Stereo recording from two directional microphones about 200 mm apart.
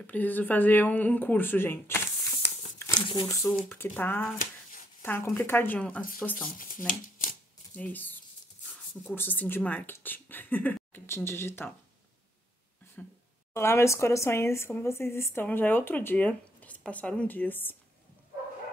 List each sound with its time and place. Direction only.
0.0 s speech: 10° left (ahead or behind)
2.4 s speech: 25° left (ahead or behind); by 6.0 s 5° left (ahead or behind)
6.9 s shuffling cards: 40° left (ahead or behind)
7.7 s speech: 10° left (ahead or behind)
13.0 s speech: 5° left (ahead or behind)